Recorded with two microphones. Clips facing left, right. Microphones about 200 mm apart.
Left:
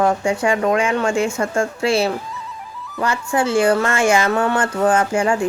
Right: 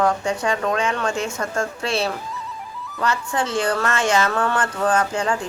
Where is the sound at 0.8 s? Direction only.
10° left (ahead or behind).